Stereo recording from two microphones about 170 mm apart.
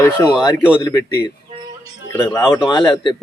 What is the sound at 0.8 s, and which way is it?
Speech, 20° left (ahead or behind).